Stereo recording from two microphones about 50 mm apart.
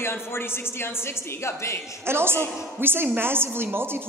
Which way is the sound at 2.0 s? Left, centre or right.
Right.